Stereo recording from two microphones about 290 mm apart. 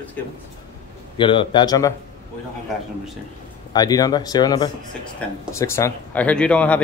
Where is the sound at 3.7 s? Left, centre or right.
Centre.